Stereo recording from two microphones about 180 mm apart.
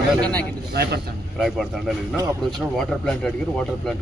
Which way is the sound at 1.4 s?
Centre (ahead or behind).